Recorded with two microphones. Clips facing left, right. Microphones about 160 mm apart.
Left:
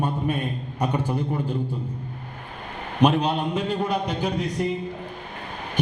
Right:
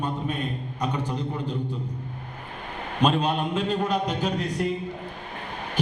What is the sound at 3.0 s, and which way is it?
A man's voice, 15° left (ahead or behind).